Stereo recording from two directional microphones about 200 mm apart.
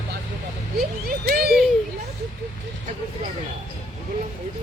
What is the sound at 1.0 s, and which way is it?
Speech, 50° right (ahead or behind).